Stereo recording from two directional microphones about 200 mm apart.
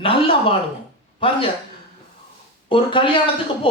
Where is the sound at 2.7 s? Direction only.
25° left (ahead or behind).